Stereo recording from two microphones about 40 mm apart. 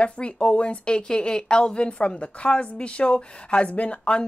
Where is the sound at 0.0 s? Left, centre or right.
Left.